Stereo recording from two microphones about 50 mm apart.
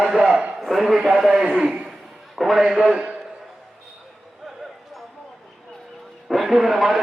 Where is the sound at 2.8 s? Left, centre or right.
Right.